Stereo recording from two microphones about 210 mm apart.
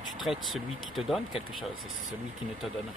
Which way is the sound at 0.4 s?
Centre (ahead or behind).